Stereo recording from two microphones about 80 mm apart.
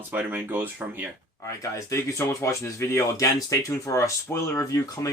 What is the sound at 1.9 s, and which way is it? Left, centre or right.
Speech, left.